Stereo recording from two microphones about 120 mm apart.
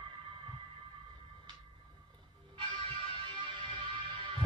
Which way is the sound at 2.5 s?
45° right (ahead or behind).